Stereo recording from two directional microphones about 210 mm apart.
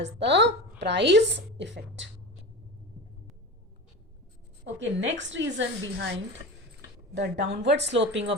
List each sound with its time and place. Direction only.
0.0 s a woman's voice: 55° right (ahead or behind)
4.6 s a woman's voice: 60° right (ahead or behind)
7.1 s a woman's voice: 55° right (ahead or behind)